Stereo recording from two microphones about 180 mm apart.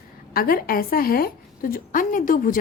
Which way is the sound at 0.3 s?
55° left (ahead or behind).